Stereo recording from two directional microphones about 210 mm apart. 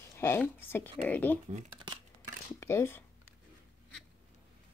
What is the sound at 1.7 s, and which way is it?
Scissors, 20° right (ahead or behind).